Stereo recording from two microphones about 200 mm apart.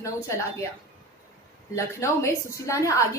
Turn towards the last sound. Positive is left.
turn(degrees=15)  # may be behind; listen again after turning